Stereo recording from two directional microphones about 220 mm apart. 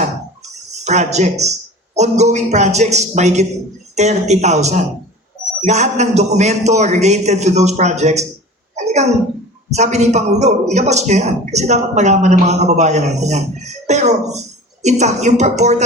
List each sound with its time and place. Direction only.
0.9 s a man's voice: 30° right (ahead or behind)
8.7 s a sound: 30° right (ahead or behind)
9.6 s a man's voice: 30° right (ahead or behind)